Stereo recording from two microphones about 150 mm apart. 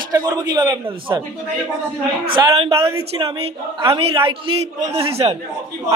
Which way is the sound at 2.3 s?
35° right (ahead or behind).